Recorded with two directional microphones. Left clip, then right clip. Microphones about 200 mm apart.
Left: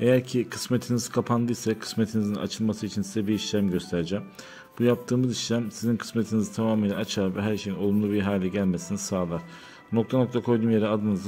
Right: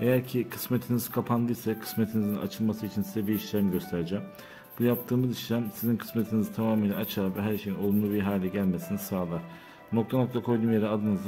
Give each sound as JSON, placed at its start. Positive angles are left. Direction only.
{"t": 0.0, "sound": "speech", "side_deg": 20}